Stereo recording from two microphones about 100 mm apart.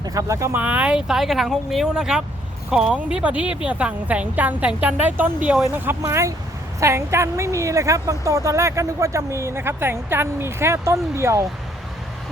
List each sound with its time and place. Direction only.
0.0 s speech: 35° right (ahead or behind)
0.5 s a woman's voice: 15° right (ahead or behind)